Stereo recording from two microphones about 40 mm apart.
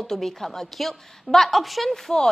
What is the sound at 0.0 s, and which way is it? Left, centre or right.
A woman's voice, centre.